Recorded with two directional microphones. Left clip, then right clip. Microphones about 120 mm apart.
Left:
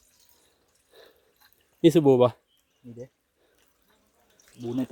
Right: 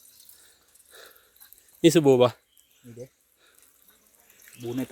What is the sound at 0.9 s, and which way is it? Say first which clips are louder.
Dog: right 4 dB; 15° left (ahead or behind).